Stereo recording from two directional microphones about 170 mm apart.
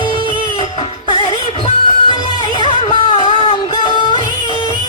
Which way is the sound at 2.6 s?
30° left (ahead or behind).